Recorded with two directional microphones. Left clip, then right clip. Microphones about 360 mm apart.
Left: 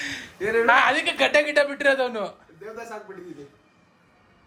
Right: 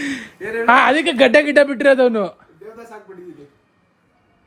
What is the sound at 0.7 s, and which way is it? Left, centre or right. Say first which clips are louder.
Speech: right 8 dB; centre.